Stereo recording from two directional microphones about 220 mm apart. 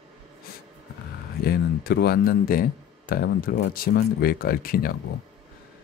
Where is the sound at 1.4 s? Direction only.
45° left (ahead or behind).